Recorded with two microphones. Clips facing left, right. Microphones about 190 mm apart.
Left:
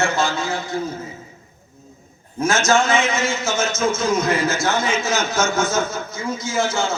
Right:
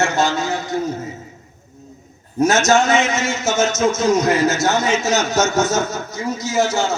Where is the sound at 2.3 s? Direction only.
40° right (ahead or behind).